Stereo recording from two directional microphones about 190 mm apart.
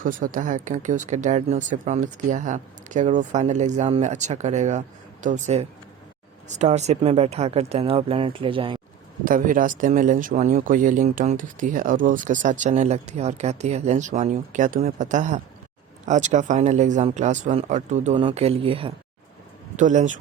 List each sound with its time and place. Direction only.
0.0 s speech: 45° right (ahead or behind); by 8.8 s 25° right (ahead or behind)
9.2 s speech: 45° right (ahead or behind); by 18.9 s 30° right (ahead or behind)
19.7 s speech: 40° right (ahead or behind)